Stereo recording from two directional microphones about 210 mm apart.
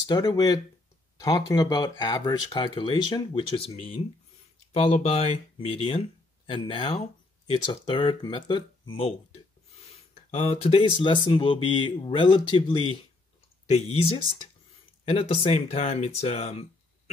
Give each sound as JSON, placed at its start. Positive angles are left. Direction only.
{"t": 0.0, "sound": "speech", "side_deg": 15}